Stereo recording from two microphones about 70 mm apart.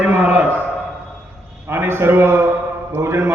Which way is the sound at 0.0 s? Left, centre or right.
Right.